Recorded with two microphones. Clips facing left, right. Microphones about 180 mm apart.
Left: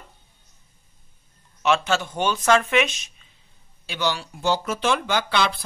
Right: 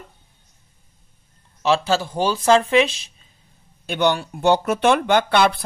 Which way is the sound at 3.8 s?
55° right (ahead or behind).